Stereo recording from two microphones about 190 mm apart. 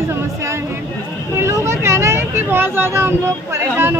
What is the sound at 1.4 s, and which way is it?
Speech, 15° right (ahead or behind).